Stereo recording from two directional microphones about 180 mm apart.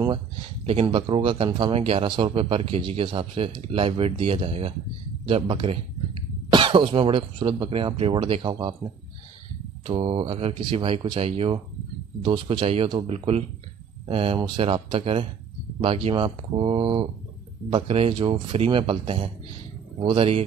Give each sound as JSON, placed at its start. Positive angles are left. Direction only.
{"t": 0.8, "sound": "a man's voice", "side_deg": -30}
{"t": 9.8, "sound": "a man's voice", "side_deg": -30}